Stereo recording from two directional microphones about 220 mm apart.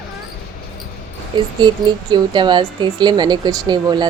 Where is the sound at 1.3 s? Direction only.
25° right (ahead or behind).